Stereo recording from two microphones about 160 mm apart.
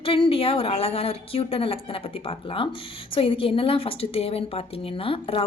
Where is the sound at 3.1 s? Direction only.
35° left (ahead or behind).